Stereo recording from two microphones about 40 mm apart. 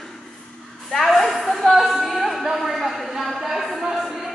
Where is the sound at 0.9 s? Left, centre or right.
Centre.